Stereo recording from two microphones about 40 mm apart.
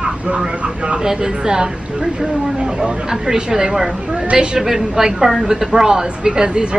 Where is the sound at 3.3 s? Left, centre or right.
Centre.